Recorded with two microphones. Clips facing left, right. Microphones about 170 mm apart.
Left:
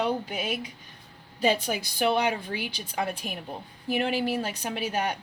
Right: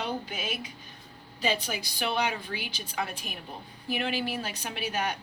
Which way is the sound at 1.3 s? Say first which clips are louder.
Left 5 dB; 50° left (ahead or behind).